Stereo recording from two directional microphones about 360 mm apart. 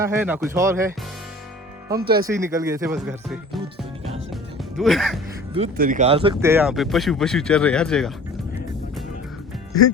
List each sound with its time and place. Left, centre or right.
0.0 s speech: centre
2.0 s speech: right
2.2 s speech: centre
4.8 s speech: centre
5.5 s speech: right; by 8.1 s centre